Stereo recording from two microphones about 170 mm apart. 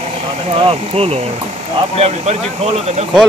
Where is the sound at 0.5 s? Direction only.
35° right (ahead or behind).